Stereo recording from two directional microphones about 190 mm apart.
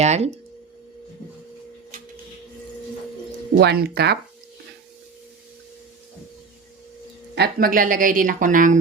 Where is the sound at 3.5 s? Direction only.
55° right (ahead or behind).